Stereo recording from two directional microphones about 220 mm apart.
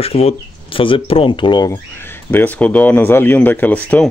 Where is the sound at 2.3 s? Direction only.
5° left (ahead or behind).